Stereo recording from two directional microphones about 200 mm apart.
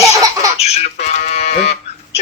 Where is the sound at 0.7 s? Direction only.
35° left (ahead or behind).